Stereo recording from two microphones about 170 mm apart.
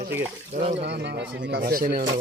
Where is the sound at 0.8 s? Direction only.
75° right (ahead or behind); by 2.0 s 60° right (ahead or behind).